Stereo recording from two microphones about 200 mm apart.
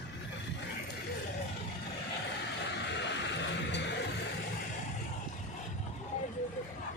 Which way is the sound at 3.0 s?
60° left (ahead or behind).